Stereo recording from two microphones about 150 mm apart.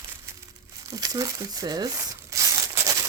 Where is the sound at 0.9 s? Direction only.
25° right (ahead or behind).